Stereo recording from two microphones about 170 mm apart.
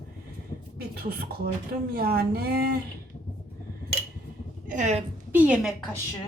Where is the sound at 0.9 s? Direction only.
65° right (ahead or behind).